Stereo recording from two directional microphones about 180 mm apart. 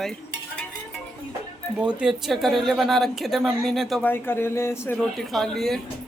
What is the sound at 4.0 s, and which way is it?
Speech, 10° left (ahead or behind).